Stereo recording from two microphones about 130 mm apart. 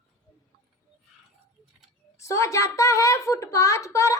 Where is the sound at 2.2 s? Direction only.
20° left (ahead or behind).